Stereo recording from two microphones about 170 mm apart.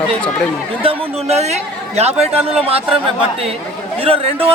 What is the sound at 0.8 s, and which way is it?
A man's voice, 30° right (ahead or behind).